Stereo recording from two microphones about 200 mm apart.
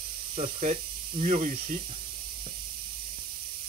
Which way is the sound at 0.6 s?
45° right (ahead or behind).